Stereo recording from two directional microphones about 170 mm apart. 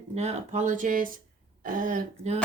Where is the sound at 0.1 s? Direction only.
40° right (ahead or behind).